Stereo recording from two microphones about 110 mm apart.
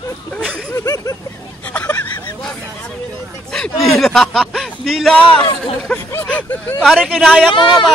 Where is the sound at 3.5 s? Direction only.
5° left (ahead or behind).